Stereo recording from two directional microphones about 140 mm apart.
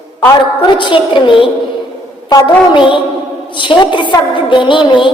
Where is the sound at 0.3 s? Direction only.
35° left (ahead or behind).